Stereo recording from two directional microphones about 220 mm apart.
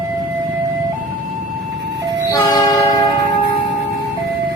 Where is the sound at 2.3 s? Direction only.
15° left (ahead or behind).